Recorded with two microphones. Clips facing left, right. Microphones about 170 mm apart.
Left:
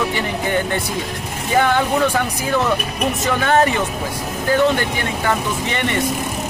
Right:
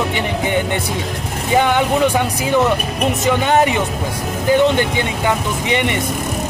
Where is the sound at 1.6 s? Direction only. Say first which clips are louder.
Right 1 dB; 20° right (ahead or behind).